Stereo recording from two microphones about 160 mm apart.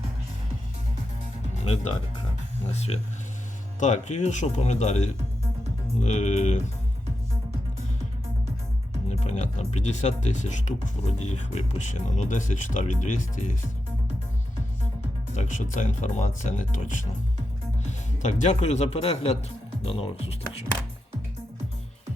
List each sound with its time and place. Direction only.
1.6 s speech: 40° left (ahead or behind)
9.0 s speech: 45° left (ahead or behind)
15.4 s speech: 50° left (ahead or behind)